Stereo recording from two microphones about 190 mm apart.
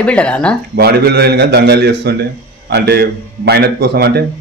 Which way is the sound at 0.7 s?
55° right (ahead or behind).